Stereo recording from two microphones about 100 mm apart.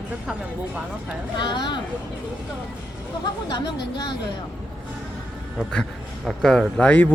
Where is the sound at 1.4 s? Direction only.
50° left (ahead or behind).